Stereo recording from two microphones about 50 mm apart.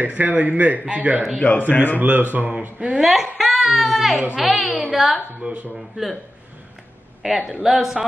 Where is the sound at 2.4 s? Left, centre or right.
Right.